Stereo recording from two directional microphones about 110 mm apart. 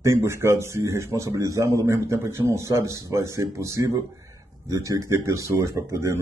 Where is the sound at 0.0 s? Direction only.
25° right (ahead or behind).